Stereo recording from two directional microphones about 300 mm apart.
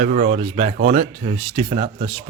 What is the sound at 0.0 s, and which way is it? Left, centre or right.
Speech, right.